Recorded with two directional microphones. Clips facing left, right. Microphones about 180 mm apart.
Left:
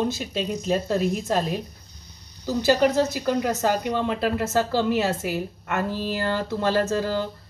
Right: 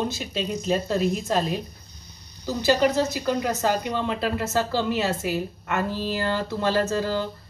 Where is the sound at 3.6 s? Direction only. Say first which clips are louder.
Left 1 dB; 50° left (ahead or behind).